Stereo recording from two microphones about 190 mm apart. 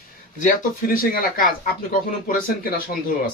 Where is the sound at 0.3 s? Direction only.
45° left (ahead or behind).